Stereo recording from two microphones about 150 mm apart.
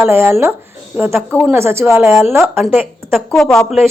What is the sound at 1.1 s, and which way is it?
Speech, 10° left (ahead or behind).